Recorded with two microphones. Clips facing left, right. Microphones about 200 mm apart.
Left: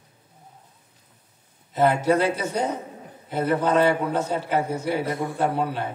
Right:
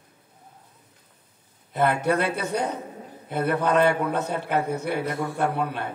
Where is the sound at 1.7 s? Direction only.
60° right (ahead or behind).